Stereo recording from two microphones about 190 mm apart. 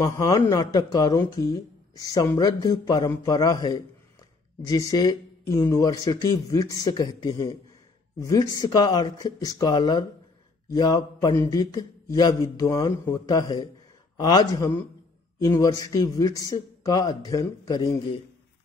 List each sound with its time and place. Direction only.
0.0 s speech: 20° left (ahead or behind)